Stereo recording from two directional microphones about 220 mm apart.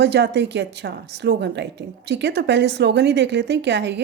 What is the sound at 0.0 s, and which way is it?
Speech, 50° right (ahead or behind).